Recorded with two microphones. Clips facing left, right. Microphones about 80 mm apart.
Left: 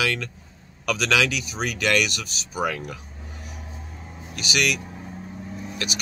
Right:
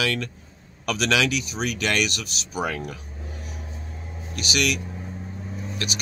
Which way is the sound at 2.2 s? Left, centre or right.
Left.